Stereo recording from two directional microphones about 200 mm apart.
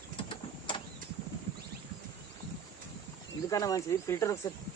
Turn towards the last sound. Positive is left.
turn(degrees=15)  # may be behind; listen again after turning